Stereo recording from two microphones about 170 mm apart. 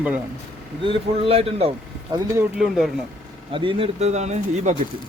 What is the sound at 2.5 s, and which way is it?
Speech, centre (ahead or behind).